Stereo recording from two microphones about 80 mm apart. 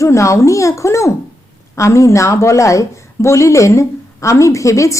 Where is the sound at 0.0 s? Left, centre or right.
Left.